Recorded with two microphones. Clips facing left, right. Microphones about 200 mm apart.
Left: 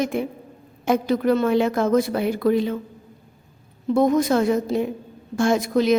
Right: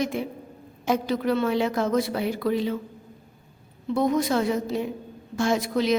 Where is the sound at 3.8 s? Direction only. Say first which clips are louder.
Left 5 dB; 45° left (ahead or behind).